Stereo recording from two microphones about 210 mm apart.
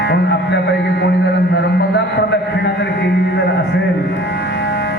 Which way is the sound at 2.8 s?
55° left (ahead or behind).